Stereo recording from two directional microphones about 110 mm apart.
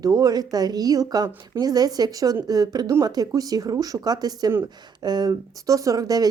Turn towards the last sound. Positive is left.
turn(degrees=-35)  # may be behind; listen again after turning